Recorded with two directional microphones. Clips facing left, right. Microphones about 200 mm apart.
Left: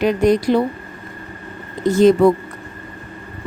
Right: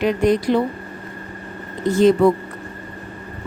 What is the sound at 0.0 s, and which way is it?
Speech, 40° left (ahead or behind).